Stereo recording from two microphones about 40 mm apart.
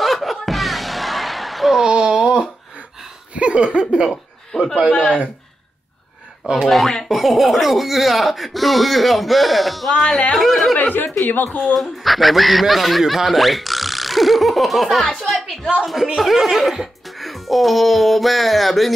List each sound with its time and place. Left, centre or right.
0.0 s music: centre
1.8 s a sound: centre
3.3 s a sound: right
4.5 s a man's voice: centre
6.7 s speech: centre
9.9 s speech: left
10.3 s speech: centre
10.8 s speech: left
11.7 s speech: centre